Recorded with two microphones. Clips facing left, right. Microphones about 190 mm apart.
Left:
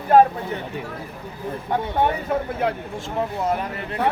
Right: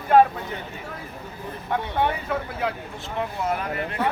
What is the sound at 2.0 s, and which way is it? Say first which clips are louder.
Speech: left 3 dB; 45° left (ahead or behind).